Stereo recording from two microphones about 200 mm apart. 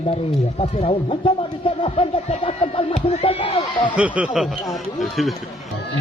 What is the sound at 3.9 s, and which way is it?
Speech, 5° right (ahead or behind).